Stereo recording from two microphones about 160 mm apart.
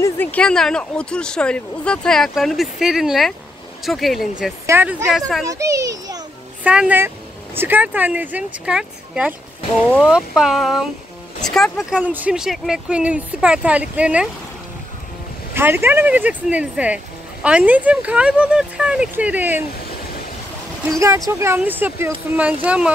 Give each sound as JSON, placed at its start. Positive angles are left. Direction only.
{"t": 0.0, "sound": "speech", "side_deg": 10}
{"t": 4.6, "sound": "a child's voice", "side_deg": -15}
{"t": 6.6, "sound": "speech", "side_deg": -5}
{"t": 15.5, "sound": "speech", "side_deg": -15}
{"t": 21.3, "sound": "speech", "side_deg": -15}